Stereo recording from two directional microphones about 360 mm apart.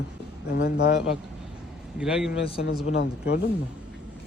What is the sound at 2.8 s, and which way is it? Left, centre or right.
Speech, left.